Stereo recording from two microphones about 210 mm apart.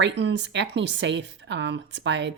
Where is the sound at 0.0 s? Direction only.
60° right (ahead or behind).